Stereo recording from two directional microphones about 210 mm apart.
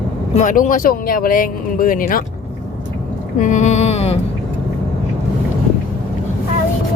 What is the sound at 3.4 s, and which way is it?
Speech, 35° left (ahead or behind).